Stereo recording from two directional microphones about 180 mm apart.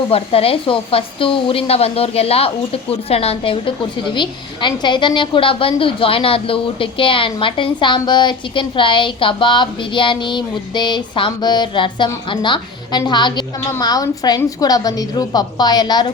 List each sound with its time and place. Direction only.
0.1 s a woman's voice: 35° left (ahead or behind)